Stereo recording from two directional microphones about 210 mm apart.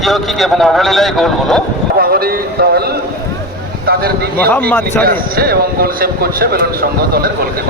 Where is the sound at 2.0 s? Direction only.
45° right (ahead or behind).